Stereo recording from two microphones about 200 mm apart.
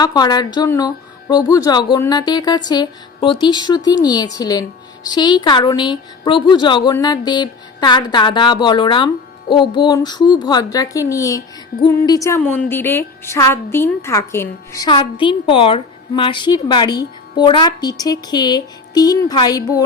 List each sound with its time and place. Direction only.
0.0 s a woman's voice: 20° left (ahead or behind)